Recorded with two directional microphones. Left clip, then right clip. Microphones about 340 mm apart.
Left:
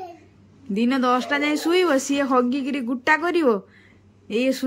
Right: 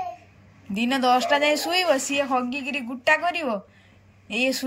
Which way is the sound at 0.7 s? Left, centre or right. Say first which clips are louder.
Even; centre.